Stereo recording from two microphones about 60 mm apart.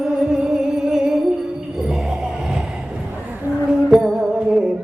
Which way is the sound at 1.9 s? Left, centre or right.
Centre.